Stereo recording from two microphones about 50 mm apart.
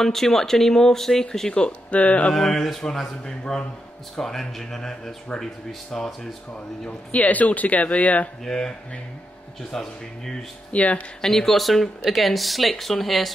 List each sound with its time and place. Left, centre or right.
0.0 s speech: centre
1.5 s speech: left
2.3 s speech: centre
6.9 s speech: left
8.5 s speech: centre
10.7 s speech: left
11.1 s speech: centre